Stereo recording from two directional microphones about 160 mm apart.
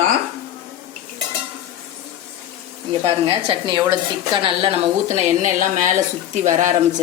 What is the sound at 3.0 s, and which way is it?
A woman's voice, 30° right (ahead or behind).